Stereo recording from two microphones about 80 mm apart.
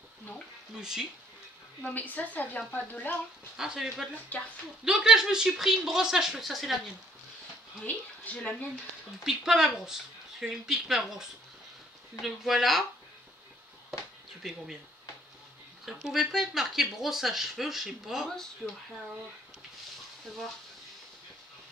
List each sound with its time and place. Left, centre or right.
0.7 s speech: centre
1.8 s a woman's voice: centre
3.5 s speech: centre
4.3 s a woman's voice: left
4.8 s speech: centre
7.8 s a woman's voice: centre
9.2 s speech: centre
15.8 s speech: centre